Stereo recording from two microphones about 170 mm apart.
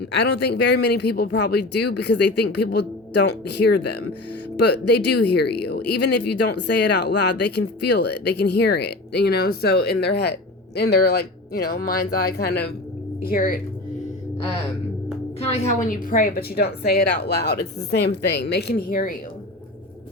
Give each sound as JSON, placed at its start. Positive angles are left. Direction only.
{"t": 0.1, "sound": "speech", "side_deg": 80}
{"t": 13.2, "sound": "speech", "side_deg": 60}
{"t": 15.5, "sound": "speech", "side_deg": 50}